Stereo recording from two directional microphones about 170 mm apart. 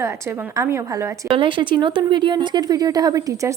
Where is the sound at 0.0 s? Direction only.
15° right (ahead or behind).